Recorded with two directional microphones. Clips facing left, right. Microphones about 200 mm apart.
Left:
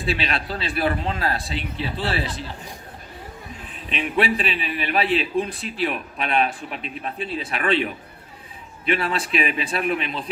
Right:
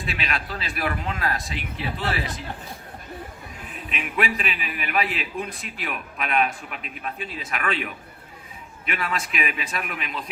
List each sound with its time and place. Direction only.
0.0 s a man's voice: 30° left (ahead or behind)
3.7 s a man's voice: 30° left (ahead or behind)